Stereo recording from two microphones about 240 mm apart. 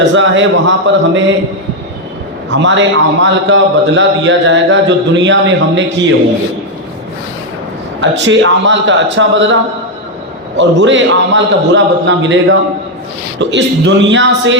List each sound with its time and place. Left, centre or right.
0.0 s a man's voice: right
2.5 s a man's voice: right
8.2 s a man's voice: right
10.6 s a man's voice: right